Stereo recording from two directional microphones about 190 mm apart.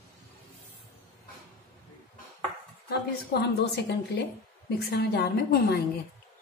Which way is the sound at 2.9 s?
60° left (ahead or behind).